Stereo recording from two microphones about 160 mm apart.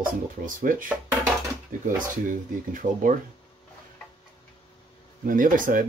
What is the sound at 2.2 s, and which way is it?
Speech, 55° right (ahead or behind).